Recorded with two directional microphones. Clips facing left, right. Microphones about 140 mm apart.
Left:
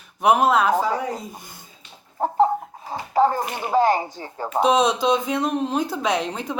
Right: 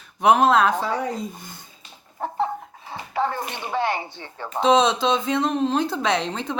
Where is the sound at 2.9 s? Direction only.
40° left (ahead or behind).